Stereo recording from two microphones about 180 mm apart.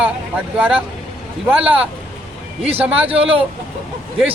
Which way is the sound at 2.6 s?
35° right (ahead or behind).